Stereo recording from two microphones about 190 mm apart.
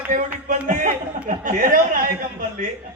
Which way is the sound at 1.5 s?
45° right (ahead or behind).